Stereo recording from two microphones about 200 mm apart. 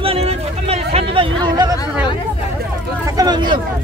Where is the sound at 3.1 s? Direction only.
20° right (ahead or behind).